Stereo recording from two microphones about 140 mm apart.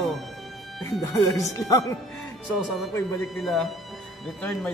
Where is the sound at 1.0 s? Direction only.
20° left (ahead or behind).